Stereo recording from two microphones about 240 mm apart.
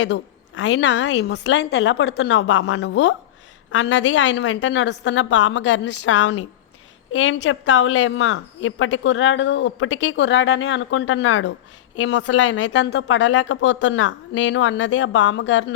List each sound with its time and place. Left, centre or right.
0.0 s a woman's voice: left